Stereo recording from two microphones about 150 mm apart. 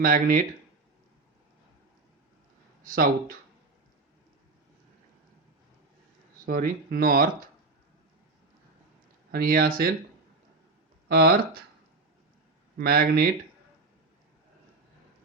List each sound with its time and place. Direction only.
0.0 s speech: 65° right (ahead or behind)
2.8 s speech: 70° right (ahead or behind)
6.4 s speech: 75° right (ahead or behind)
9.3 s speech: 80° right
11.1 s speech: 90° right
12.8 s speech: 90° right